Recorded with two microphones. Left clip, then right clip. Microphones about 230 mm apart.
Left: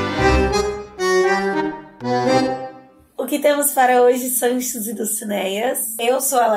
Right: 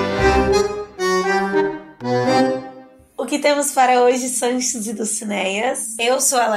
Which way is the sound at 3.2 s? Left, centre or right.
Centre.